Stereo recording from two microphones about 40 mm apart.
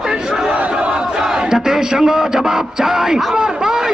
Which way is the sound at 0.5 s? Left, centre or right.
Right.